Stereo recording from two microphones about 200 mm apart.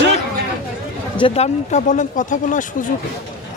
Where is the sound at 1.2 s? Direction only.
35° left (ahead or behind).